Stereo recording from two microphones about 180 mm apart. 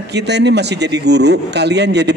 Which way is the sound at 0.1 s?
70° right (ahead or behind).